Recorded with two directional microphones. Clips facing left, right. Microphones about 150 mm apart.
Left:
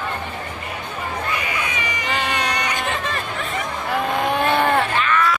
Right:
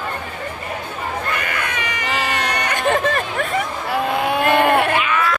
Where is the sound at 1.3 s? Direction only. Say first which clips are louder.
Right 1 dB; 55° right (ahead or behind).